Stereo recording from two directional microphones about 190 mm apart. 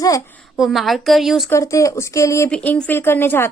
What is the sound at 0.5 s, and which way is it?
Speech, centre (ahead or behind).